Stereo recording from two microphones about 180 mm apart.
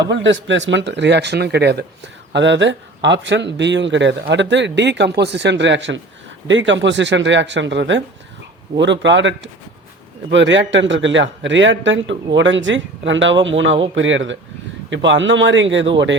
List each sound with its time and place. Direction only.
0.1 s speech: 85° right; by 1.8 s 65° right (ahead or behind)
2.3 s a man's voice: 80° right